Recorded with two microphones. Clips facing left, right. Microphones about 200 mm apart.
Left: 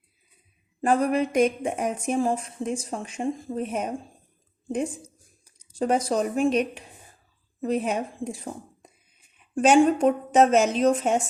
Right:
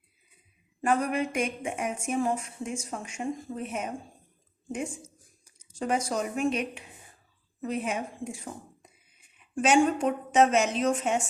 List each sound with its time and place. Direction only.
0.8 s a woman's voice: 35° left (ahead or behind)